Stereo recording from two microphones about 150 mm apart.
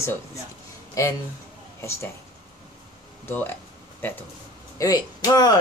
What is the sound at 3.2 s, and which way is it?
Speech, 15° left (ahead or behind).